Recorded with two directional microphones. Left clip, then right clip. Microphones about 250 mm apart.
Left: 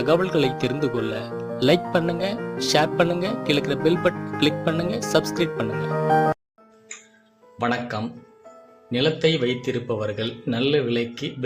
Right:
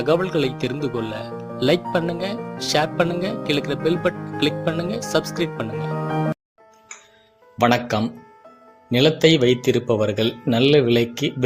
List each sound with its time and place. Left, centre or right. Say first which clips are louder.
0.0 s speech: even; centre
7.6 s speech: right 6 dB; right